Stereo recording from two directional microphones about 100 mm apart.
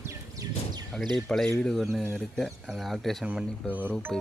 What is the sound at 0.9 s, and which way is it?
Speech, 5° left (ahead or behind).